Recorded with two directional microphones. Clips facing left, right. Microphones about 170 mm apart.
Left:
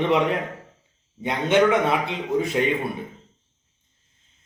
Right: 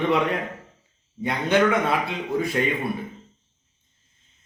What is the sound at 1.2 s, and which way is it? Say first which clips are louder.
Speech: left 1 dB; 20° left (ahead or behind).